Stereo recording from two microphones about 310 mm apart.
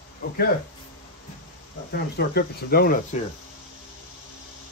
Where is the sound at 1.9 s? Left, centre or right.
Left.